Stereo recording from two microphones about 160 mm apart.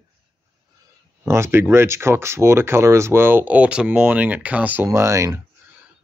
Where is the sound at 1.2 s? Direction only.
15° right (ahead or behind).